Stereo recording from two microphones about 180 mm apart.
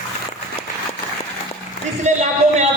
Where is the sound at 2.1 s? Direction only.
40° right (ahead or behind).